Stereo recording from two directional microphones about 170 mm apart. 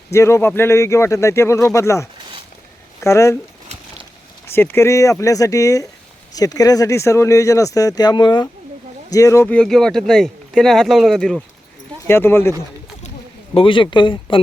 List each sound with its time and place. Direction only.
0.1 s speech: 15° left (ahead or behind)
4.4 s speech: 15° left (ahead or behind)
12.0 s speech: 15° left (ahead or behind)
13.5 s speech: 30° left (ahead or behind)